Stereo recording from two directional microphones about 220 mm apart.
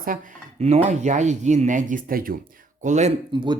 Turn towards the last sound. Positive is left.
turn(degrees=-20)  # may be behind; listen again after turning